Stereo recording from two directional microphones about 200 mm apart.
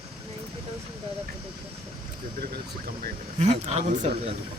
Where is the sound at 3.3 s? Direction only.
30° right (ahead or behind).